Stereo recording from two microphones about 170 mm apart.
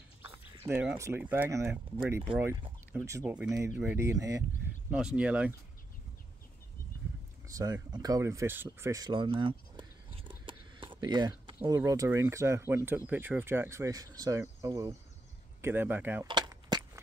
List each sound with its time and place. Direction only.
0.2 s a sound: 30° right (ahead or behind)
0.7 s speech: 5° right (ahead or behind)
4.9 s speech: 5° right (ahead or behind)
7.4 s speech: 20° right (ahead or behind)
8.6 s a sound: 20° right (ahead or behind)
11.6 s speech: 20° right (ahead or behind)
16.3 s cap gun: 25° right (ahead or behind)